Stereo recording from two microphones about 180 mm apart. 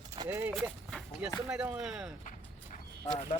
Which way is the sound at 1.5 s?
5° right (ahead or behind).